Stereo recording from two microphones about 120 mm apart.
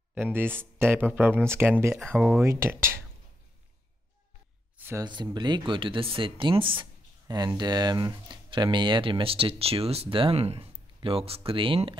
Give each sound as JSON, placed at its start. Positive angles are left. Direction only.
{"t": 0.1, "sound": "speech", "side_deg": -15}
{"t": 4.7, "sound": "a sound", "side_deg": -20}
{"t": 5.0, "sound": "speech", "side_deg": -35}
{"t": 7.2, "sound": "speech", "side_deg": -35}